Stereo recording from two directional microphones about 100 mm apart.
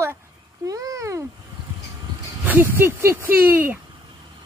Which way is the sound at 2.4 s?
20° right (ahead or behind).